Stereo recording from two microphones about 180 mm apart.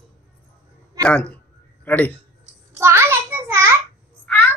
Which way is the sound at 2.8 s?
15° right (ahead or behind).